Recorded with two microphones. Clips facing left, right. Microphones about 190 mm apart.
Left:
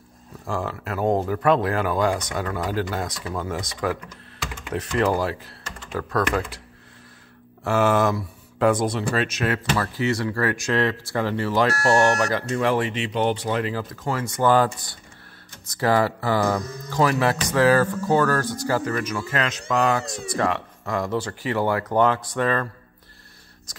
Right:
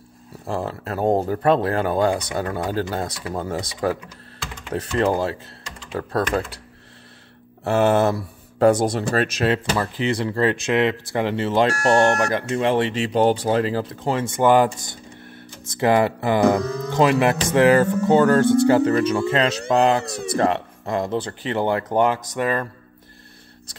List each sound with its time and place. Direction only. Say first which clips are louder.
0.6 s speech: right 2 dB; 35° right (ahead or behind)
7.6 s speech: right 2 dB; 30° right (ahead or behind)
9.4 s speech: right 3 dB; 25° right (ahead or behind)
15.7 s speech: right 3 dB; 20° right (ahead or behind)
16.6 s speech: right 10 dB; 65° right (ahead or behind)
16.9 s speech: right 3 dB; 20° right (ahead or behind)
20.1 s speech: right 4 dB; 65° right (ahead or behind)
20.3 s speech: right 4 dB; 30° right (ahead or behind)